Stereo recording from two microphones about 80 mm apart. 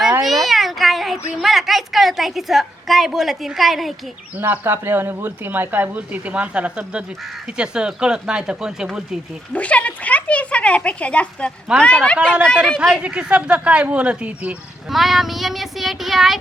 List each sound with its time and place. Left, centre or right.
0.3 s a sound: centre
1.4 s a woman's voice: centre
4.4 s speech: right; by 9.0 s centre
9.5 s speech: centre
12.7 s a woman's voice: centre
14.8 s a woman's voice: centre